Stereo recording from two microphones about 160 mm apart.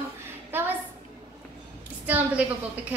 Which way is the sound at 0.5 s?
10° right (ahead or behind).